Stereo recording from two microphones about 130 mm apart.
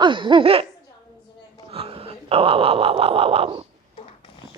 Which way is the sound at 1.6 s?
50° right (ahead or behind).